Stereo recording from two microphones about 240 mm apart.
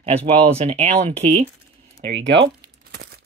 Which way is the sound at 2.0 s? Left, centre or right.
Right.